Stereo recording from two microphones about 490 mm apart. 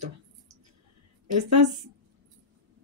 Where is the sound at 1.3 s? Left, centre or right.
Right.